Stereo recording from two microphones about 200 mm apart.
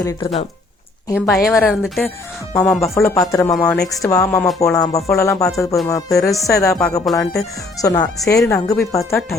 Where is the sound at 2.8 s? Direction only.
15° left (ahead or behind).